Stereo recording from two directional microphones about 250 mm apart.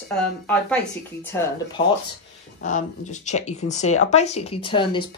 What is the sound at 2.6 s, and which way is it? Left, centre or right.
Speech, left.